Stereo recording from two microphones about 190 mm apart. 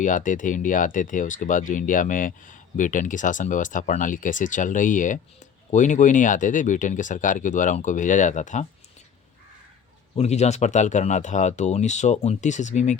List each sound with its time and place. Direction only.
0.0 s speech: 45° left (ahead or behind)
10.2 s speech: 35° left (ahead or behind)